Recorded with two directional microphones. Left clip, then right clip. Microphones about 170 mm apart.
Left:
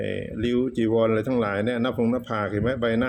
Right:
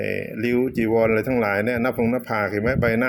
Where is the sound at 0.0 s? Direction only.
5° right (ahead or behind).